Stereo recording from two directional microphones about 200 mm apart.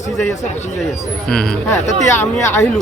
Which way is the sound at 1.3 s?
5° left (ahead or behind).